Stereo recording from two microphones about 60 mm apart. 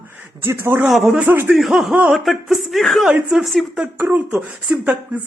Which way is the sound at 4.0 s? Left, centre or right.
Right.